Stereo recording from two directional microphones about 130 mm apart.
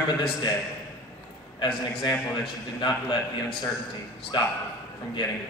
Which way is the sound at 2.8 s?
35° left (ahead or behind).